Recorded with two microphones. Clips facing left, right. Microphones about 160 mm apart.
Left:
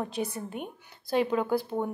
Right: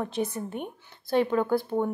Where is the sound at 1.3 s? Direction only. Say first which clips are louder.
Right 2 dB; 10° left (ahead or behind).